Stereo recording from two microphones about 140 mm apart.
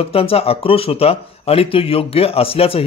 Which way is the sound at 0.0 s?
45° left (ahead or behind).